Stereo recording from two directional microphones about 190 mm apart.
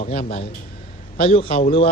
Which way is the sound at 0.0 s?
50° left (ahead or behind).